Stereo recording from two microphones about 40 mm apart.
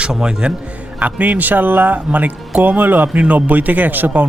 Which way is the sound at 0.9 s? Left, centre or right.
Right.